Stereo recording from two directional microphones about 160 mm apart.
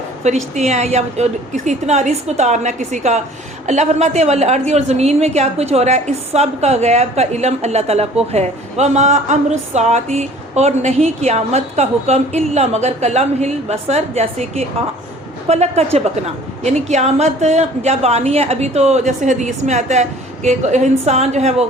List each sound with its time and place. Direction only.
0.3 s a woman's voice: 45° right (ahead or behind)